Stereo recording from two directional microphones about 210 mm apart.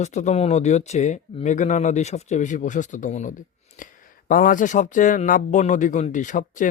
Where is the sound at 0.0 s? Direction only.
35° left (ahead or behind).